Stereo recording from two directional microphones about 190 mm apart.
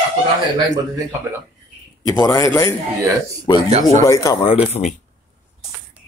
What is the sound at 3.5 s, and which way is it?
Speech, 20° left (ahead or behind).